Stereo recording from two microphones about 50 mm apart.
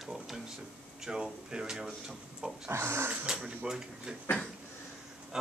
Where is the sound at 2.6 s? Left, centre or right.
Right.